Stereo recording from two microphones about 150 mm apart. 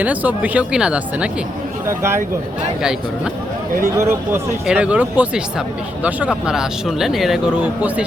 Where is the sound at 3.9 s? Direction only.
15° right (ahead or behind).